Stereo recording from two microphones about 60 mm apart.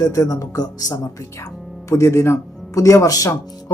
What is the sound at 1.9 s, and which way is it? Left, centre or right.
Speech, left.